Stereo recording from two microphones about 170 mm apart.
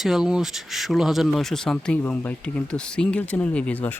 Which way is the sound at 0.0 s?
Centre (ahead or behind).